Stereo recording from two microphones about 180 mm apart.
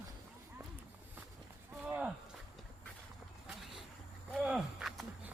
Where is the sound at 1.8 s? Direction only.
10° right (ahead or behind).